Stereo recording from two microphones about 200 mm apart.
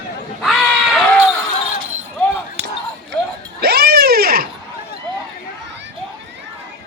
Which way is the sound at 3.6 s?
50° right (ahead or behind).